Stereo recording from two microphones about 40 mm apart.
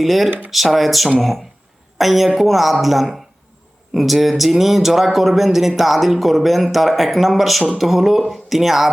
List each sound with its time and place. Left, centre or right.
0.0 s speech: centre
0.3 s speech: right
0.5 s speech: centre